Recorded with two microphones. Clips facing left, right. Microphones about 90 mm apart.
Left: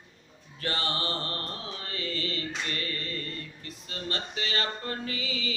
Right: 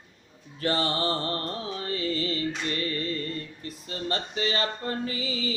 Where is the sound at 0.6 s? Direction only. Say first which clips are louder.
Right 5 dB; 30° right (ahead or behind).